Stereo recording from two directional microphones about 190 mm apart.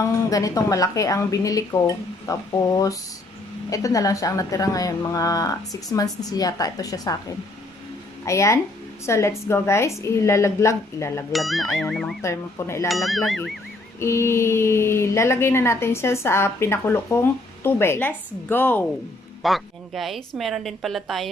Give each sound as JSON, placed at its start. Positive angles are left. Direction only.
{"t": 0.3, "sound": "speech", "side_deg": 20}
{"t": 3.7, "sound": "a woman's voice", "side_deg": 15}
{"t": 11.3, "sound": "a woman's voice", "side_deg": 0}
{"t": 12.2, "sound": "speech", "side_deg": 15}
{"t": 12.8, "sound": "a woman's voice", "side_deg": 0}
{"t": 13.9, "sound": "a woman's voice", "side_deg": 15}